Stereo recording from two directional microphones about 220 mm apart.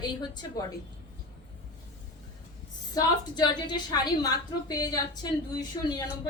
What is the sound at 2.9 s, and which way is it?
A woman's voice, 20° left (ahead or behind).